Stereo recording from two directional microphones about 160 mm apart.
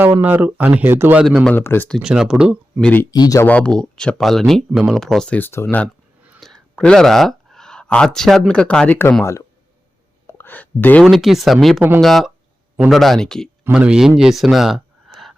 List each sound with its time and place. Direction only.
0.0 s speech: 10° right (ahead or behind)
1.2 s speech: 5° right (ahead or behind)
1.5 s speech: 10° left (ahead or behind)
2.0 s speech: 5° right (ahead or behind)
2.8 s speech: 10° left (ahead or behind)
3.1 s speech: 20° left (ahead or behind)
3.4 s speech: 5° left (ahead or behind)
10.2 s a sound: 15° left (ahead or behind)
11.0 s speech: centre (ahead or behind)
14.2 s a sound: centre (ahead or behind)